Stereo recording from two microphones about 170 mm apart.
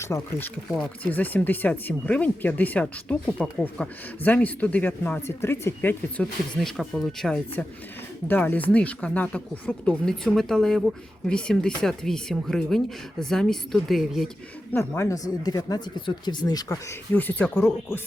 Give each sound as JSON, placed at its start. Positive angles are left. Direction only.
{"t": 0.0, "sound": "speech", "side_deg": 15}
{"t": 14.7, "sound": "speech", "side_deg": 15}